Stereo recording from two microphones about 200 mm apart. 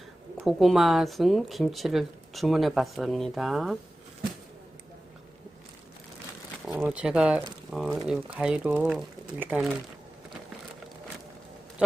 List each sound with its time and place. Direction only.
0.4 s speech: centre (ahead or behind)
6.7 s speech: 5° right (ahead or behind)
11.8 s a sound: 5° right (ahead or behind)